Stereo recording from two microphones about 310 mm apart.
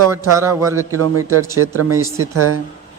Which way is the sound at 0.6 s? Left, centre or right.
Centre.